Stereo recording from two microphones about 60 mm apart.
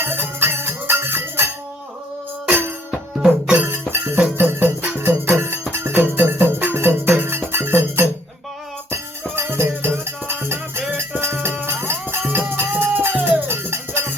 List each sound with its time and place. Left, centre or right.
0.0 s music: right
3.2 s music: centre
3.7 s music: right
9.3 s music: right